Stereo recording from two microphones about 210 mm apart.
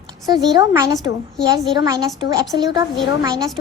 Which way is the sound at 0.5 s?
15° right (ahead or behind).